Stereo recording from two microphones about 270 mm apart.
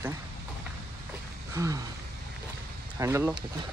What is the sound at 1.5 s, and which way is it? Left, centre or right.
Speech, centre.